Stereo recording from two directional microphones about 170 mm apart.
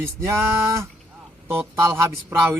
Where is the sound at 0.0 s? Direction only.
15° right (ahead or behind).